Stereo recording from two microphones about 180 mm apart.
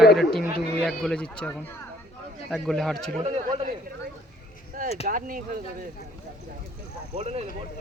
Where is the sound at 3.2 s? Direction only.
35° right (ahead or behind).